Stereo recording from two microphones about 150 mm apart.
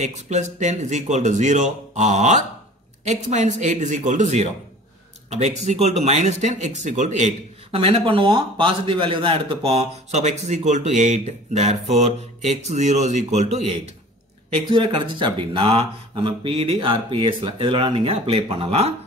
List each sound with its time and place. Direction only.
0.0 s speech: 50° right (ahead or behind)
14.7 s speech: 35° right (ahead or behind)